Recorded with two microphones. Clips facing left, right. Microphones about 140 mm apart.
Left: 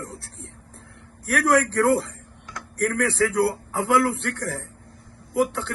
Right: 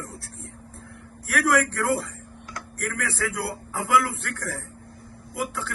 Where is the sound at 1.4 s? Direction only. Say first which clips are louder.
Left 2 dB; 30° left (ahead or behind).